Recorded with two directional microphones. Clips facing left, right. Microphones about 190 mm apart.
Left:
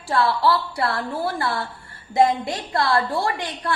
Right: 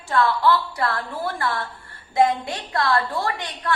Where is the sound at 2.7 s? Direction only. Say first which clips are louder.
Left 1 dB; 30° left (ahead or behind).